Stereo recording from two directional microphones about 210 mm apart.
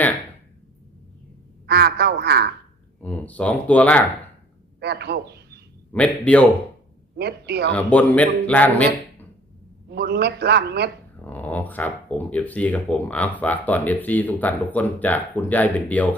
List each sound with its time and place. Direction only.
1.6 s a man's voice: 50° right (ahead or behind)
3.0 s speech: 5° left (ahead or behind)
4.8 s a man's voice: 50° right (ahead or behind)
5.9 s speech: 5° left (ahead or behind)
7.2 s a man's voice: 50° right (ahead or behind)
7.7 s speech: 5° left (ahead or behind)
9.9 s a man's voice: 50° right (ahead or behind)
11.2 s speech: 10° left (ahead or behind)